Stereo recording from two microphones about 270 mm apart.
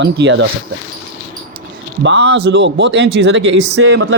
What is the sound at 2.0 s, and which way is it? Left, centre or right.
A man's voice, right.